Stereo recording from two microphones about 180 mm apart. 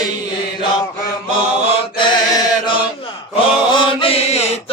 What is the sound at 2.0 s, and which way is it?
Chant, 25° left (ahead or behind).